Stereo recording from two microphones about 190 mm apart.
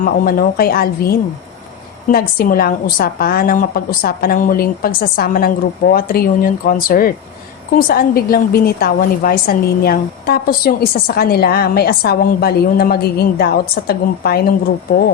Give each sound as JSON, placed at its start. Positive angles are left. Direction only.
{"t": 0.0, "sound": "a woman's voice", "side_deg": 50}